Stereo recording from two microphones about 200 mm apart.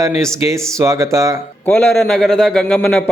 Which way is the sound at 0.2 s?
15° right (ahead or behind).